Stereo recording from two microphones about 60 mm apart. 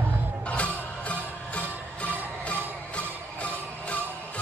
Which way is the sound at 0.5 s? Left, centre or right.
Left.